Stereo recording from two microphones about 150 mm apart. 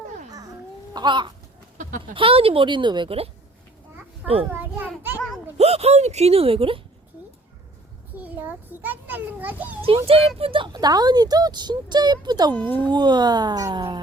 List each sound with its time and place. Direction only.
0.9 s speech: 30° right (ahead or behind)
4.4 s a child's voice: 10° right (ahead or behind)
5.5 s speech: 45° right (ahead or behind)
8.1 s a child's voice: 10° right (ahead or behind)
10.1 s speech: 40° right (ahead or behind)